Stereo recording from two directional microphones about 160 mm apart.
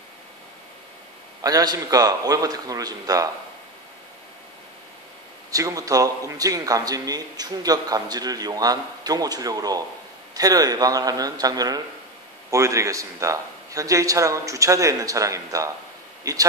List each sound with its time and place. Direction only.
1.4 s a man's voice: 25° right (ahead or behind)
5.5 s a man's voice: 20° right (ahead or behind)